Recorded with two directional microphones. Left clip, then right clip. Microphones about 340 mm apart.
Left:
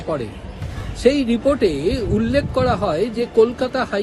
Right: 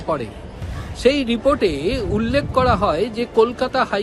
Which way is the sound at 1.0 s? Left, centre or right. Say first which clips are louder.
Even; centre.